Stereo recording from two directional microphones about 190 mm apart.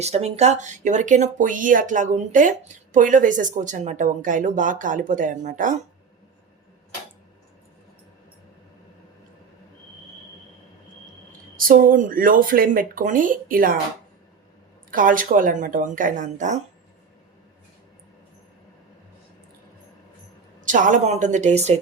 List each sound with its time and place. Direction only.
0.0 s speech: 35° right (ahead or behind)
11.3 s speech: 45° right (ahead or behind)
14.8 s speech: 45° right (ahead or behind)
20.7 s speech: 40° right (ahead or behind)